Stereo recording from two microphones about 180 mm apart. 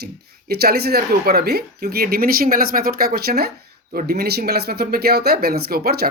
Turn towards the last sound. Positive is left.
turn(degrees=-60)  # may be behind; listen again after turning